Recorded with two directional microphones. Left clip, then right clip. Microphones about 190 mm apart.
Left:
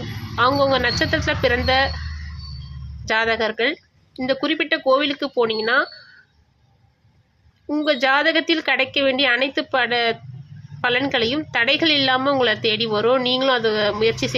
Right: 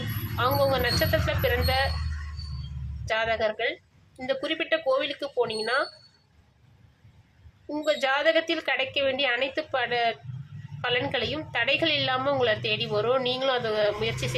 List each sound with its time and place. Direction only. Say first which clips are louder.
0.3 s a woman's voice: left 7 dB; 25° left (ahead or behind)
3.1 s a woman's voice: left 6 dB; 25° left (ahead or behind)
7.7 s a woman's voice: left 7 dB; 20° left (ahead or behind)